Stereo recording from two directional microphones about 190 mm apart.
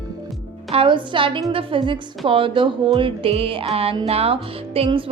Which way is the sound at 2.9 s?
30° right (ahead or behind).